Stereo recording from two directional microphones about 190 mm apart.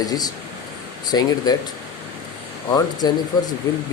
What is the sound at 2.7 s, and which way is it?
Speech, 20° left (ahead or behind).